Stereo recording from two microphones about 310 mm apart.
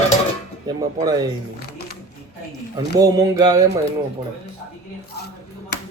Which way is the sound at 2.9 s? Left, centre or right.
Centre.